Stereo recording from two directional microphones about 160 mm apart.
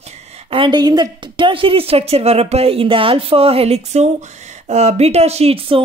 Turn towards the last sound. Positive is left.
turn(degrees=-35)  # may be behind; listen again after turning